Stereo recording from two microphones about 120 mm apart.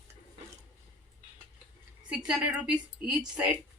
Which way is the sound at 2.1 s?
5° right (ahead or behind).